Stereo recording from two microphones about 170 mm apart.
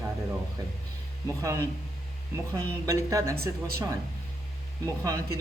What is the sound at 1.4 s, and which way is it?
Speech, 15° right (ahead or behind).